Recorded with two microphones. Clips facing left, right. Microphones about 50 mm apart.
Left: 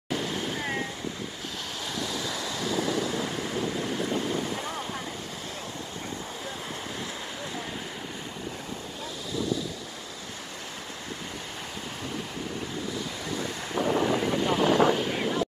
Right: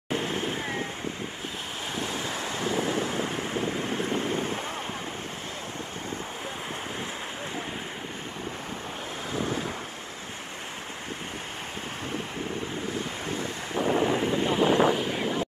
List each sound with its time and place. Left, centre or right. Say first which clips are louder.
0.1 s vehicle: right 1 dB; right
2.0 s wind: right 1 dB; right
9.3 s wind noise: left 1 dB; right
12.8 s waves: right 2 dB; right
13.7 s vehicle: right 1 dB; right
15.0 s vehicle: even; centre